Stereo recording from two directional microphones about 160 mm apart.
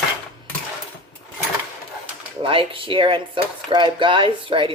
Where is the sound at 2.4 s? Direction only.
35° right (ahead or behind).